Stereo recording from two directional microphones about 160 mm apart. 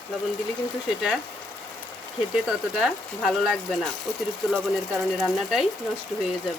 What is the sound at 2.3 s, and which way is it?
Speech, centre (ahead or behind).